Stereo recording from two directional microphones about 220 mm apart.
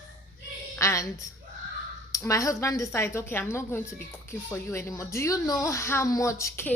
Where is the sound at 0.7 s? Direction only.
15° left (ahead or behind).